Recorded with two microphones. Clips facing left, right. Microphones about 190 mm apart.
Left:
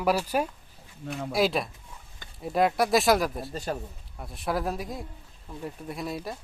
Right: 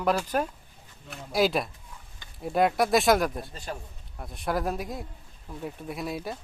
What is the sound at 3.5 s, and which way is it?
Speech, 40° left (ahead or behind).